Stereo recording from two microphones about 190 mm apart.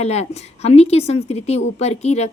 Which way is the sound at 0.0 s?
35° left (ahead or behind).